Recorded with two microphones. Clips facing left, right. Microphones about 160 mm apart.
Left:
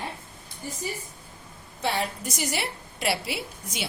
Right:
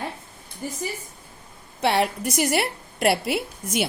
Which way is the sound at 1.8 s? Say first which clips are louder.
Right 7 dB; 70° right (ahead or behind).